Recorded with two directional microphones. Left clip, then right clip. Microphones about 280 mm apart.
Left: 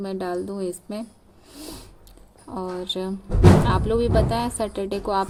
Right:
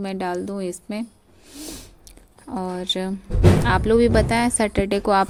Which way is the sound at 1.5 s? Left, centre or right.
Centre.